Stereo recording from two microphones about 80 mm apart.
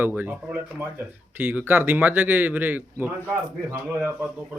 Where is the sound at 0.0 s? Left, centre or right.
Right.